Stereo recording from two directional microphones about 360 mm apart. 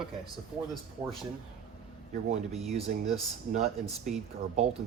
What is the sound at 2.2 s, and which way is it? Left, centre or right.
Speech, centre.